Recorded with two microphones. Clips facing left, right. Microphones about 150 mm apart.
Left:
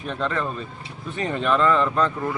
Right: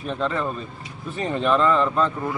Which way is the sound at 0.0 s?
Centre (ahead or behind).